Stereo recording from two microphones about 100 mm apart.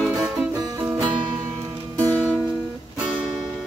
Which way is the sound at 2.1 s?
15° left (ahead or behind).